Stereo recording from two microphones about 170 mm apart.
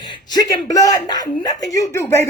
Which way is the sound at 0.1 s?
25° left (ahead or behind).